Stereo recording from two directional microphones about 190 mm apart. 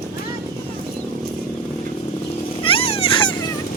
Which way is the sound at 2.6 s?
30° left (ahead or behind).